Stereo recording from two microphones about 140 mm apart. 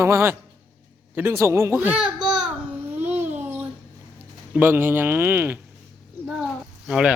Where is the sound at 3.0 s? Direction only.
15° right (ahead or behind).